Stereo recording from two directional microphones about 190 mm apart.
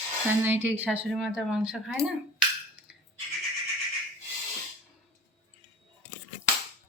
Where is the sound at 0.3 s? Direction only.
10° right (ahead or behind).